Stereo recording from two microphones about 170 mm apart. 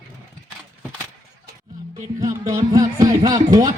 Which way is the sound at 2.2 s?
20° right (ahead or behind).